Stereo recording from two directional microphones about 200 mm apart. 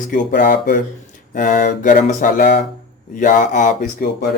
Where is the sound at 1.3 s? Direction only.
40° left (ahead or behind).